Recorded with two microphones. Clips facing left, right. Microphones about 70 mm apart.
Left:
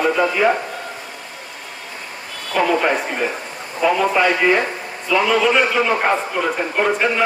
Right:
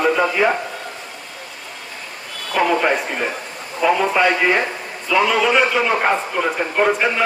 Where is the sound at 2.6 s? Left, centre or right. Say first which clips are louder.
Even; centre.